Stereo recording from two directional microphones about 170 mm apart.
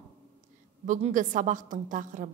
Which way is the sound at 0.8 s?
50° right (ahead or behind).